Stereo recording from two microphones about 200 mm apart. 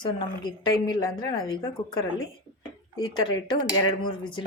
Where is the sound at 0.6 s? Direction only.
20° left (ahead or behind).